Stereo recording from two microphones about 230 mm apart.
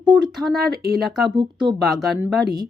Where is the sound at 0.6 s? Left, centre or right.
Right.